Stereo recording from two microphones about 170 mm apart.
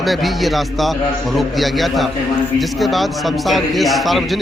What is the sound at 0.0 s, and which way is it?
A man's voice, centre (ahead or behind).